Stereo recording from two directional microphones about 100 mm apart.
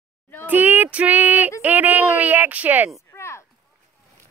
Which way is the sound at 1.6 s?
15° right (ahead or behind).